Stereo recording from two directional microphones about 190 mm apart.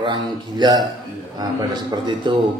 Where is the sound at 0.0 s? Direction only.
25° right (ahead or behind).